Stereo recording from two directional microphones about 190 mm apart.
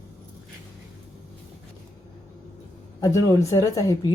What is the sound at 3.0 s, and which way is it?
A woman's voice, 15° left (ahead or behind).